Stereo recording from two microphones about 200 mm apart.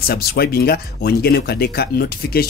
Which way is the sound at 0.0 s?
50° left (ahead or behind).